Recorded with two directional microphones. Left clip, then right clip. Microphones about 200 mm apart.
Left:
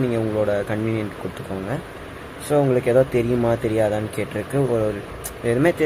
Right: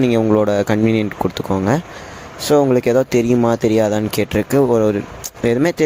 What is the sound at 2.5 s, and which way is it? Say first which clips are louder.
A man's voice: right 4 dB; 40° right (ahead or behind).